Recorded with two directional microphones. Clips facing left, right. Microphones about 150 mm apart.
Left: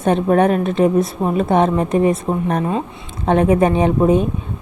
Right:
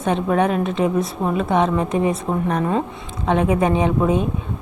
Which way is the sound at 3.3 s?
45° left (ahead or behind).